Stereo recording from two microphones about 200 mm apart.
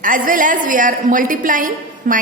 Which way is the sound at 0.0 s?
40° right (ahead or behind).